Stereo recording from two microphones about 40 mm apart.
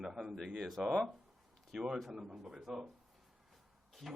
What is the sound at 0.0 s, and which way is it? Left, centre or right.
Speech, centre.